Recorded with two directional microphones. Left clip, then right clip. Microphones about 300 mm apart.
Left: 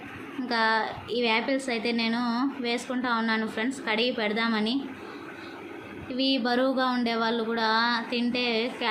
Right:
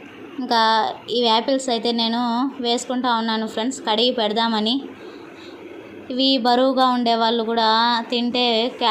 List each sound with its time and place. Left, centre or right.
0.4 s speech: centre
2.2 s speech: centre
2.6 s speech: centre
6.1 s speech: centre